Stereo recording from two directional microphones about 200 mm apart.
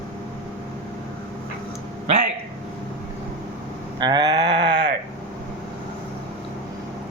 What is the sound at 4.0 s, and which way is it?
Sheep, 20° right (ahead or behind).